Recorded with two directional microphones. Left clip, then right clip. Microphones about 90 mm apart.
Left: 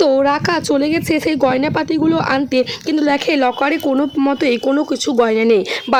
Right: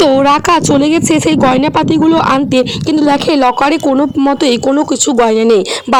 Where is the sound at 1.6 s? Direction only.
90° right.